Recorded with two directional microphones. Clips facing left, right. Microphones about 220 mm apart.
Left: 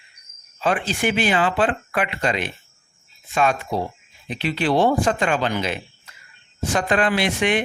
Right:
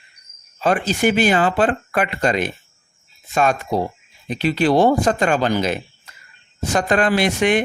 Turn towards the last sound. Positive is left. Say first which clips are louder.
# right 4 dB
turn(degrees=-45)  # may be behind; listen again after turning